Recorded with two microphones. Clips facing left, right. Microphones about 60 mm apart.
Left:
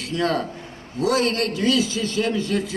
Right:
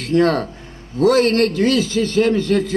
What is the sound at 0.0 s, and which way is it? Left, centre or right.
A man's voice, right.